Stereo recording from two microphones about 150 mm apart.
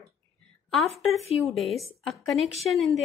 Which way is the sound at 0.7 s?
Centre (ahead or behind).